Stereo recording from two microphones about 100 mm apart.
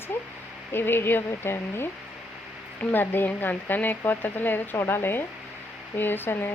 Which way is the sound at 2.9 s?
20° left (ahead or behind).